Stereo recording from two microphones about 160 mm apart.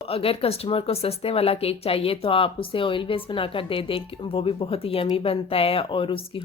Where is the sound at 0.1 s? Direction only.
35° left (ahead or behind).